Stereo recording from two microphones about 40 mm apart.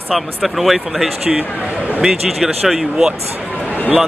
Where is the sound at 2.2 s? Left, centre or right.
Centre.